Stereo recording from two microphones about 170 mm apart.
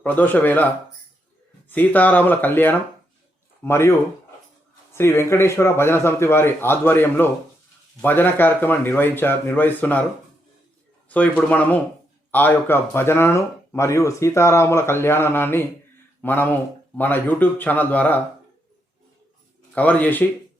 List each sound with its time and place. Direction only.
0.0 s speech: 10° left (ahead or behind)
1.7 s speech: 10° left (ahead or behind)
4.9 s speech: 15° left (ahead or behind)
11.1 s speech: 10° left (ahead or behind)
19.7 s speech: 10° left (ahead or behind)